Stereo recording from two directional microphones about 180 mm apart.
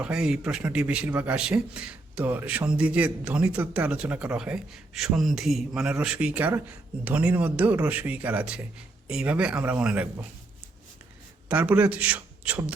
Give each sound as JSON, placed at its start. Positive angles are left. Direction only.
{"t": 0.0, "sound": "a man's voice", "side_deg": -5}
{"t": 11.4, "sound": "a man's voice", "side_deg": -10}